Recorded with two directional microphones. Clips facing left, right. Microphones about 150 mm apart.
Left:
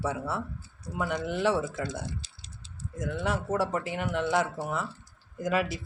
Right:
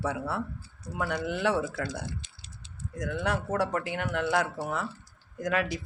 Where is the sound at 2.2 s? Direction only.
35° left (ahead or behind).